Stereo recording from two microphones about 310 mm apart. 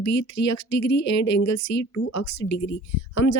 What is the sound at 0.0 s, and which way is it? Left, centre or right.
Speech, left.